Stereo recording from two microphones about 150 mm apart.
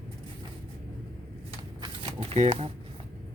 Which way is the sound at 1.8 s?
35° right (ahead or behind).